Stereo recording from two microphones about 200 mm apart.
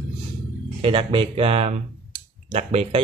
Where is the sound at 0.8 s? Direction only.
25° right (ahead or behind).